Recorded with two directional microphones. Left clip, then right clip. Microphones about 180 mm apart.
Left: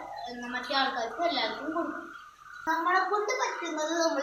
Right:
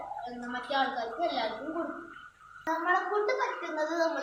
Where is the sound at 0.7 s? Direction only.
Centre (ahead or behind).